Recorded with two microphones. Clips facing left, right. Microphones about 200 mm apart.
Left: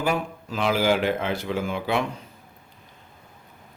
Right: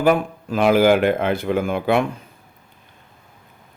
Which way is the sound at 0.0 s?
55° right (ahead or behind).